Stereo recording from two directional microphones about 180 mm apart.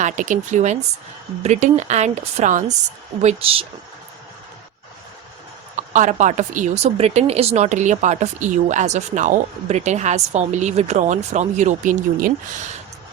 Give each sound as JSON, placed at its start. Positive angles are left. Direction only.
{"t": 0.0, "sound": "speech", "side_deg": -45}
{"t": 5.7, "sound": "speech", "side_deg": -45}